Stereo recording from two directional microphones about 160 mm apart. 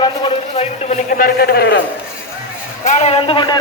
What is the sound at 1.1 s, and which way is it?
Speech, 65° left (ahead or behind).